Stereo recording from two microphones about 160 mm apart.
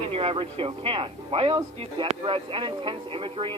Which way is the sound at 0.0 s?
35° right (ahead or behind).